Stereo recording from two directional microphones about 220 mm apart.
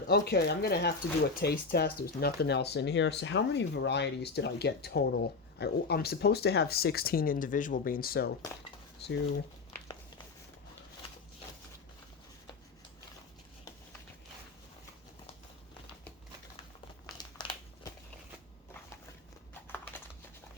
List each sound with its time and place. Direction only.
0.1 s speech: 45° left (ahead or behind)
17.2 s crumpling: 20° left (ahead or behind)
19.9 s a sound: 10° left (ahead or behind)